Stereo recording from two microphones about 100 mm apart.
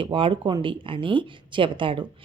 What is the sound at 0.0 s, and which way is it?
A woman's voice, 60° right (ahead or behind).